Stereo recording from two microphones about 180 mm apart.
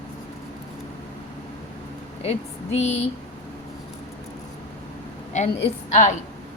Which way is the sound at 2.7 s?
35° left (ahead or behind).